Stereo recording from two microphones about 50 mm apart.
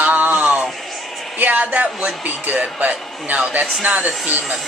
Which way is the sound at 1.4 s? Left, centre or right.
Right.